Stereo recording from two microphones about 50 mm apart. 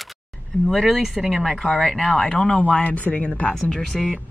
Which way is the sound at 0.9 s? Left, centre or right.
Centre.